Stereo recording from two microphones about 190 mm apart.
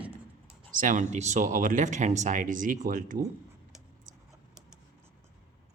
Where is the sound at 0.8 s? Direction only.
40° right (ahead or behind).